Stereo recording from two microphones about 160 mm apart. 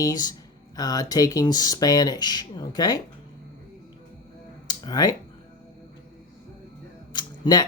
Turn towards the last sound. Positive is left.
turn(degrees=25)  # may be behind; listen again after turning